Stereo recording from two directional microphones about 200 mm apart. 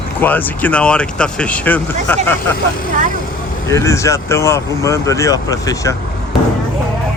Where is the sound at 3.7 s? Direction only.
15° left (ahead or behind).